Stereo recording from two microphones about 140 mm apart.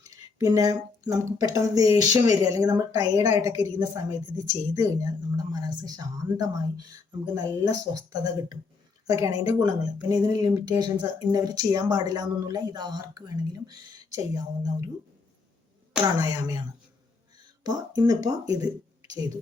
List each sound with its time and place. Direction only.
0.0 s a sound: 25° right (ahead or behind)
1.1 s speech: 25° right (ahead or behind)
16.2 s speech: 25° right (ahead or behind)
17.6 s speech: 30° right (ahead or behind)